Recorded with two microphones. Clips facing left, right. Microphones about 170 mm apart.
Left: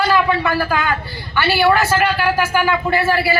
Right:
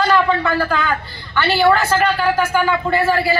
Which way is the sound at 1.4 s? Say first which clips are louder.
Even; 10° left (ahead or behind).